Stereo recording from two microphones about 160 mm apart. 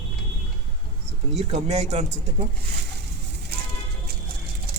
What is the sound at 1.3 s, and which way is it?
Speech, 40° right (ahead or behind).